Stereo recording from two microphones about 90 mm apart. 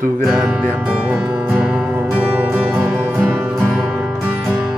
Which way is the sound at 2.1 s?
20° right (ahead or behind).